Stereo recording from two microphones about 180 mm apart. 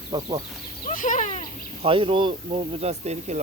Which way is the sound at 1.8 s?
30° right (ahead or behind).